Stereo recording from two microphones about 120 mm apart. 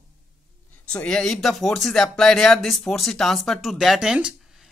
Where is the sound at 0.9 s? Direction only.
5° left (ahead or behind).